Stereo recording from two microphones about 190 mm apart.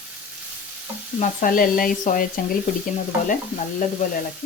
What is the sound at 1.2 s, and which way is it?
Speech, 45° left (ahead or behind).